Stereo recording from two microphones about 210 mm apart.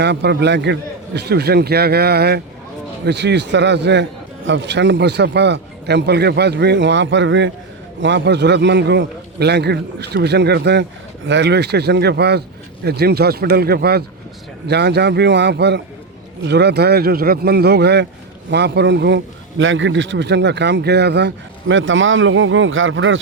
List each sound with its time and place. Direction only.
0.0 s a man's voice: 55° right (ahead or behind)